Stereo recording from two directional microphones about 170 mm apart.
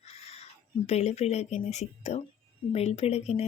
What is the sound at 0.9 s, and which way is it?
Speech, 40° left (ahead or behind).